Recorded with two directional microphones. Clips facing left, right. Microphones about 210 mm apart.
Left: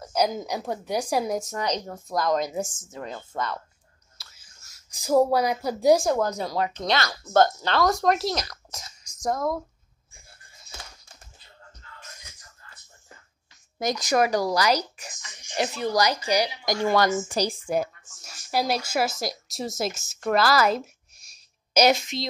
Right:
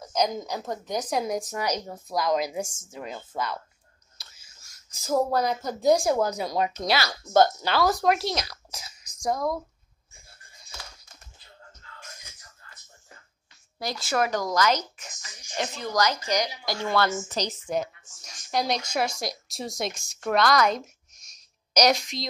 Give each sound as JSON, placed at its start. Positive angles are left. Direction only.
{"t": 0.0, "sound": "a woman's voice", "side_deg": 5}
{"t": 1.4, "sound": "a woman's voice", "side_deg": -15}
{"t": 4.2, "sound": "whispering", "side_deg": -15}
{"t": 4.6, "sound": "speech", "side_deg": 5}
{"t": 6.0, "sound": "a woman's voice", "side_deg": -5}
{"t": 13.7, "sound": "a woman's voice", "side_deg": 20}